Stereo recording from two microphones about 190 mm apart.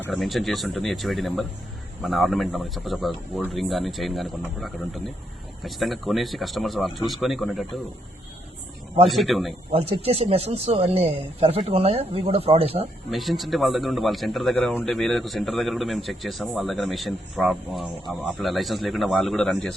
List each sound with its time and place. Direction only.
0.0 s a man's voice: centre (ahead or behind)
9.0 s a man's voice: centre (ahead or behind)
9.7 s speech: 30° right (ahead or behind)
13.1 s a man's voice: centre (ahead or behind)